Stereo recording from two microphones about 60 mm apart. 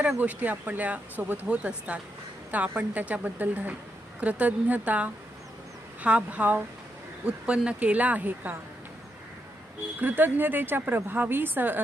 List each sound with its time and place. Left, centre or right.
0.2 s speech: right
10.0 s a woman's voice: right